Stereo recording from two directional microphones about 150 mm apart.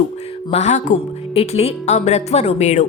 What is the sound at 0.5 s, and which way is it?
Speech, 50° left (ahead or behind).